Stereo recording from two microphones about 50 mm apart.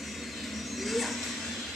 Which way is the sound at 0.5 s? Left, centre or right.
Centre.